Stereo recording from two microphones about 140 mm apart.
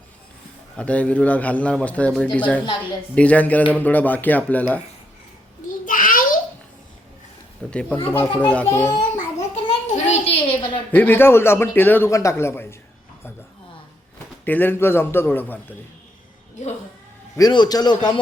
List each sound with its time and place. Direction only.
0.8 s a man's voice: 10° left (ahead or behind)
5.8 s a sound: 75° left (ahead or behind)
7.7 s a man's voice: 10° left (ahead or behind)
9.6 s a sound: 45° left (ahead or behind)
10.9 s a man's voice: 15° left (ahead or behind)
14.4 s a man's voice: 15° left (ahead or behind)
17.3 s a man's voice: 30° left (ahead or behind)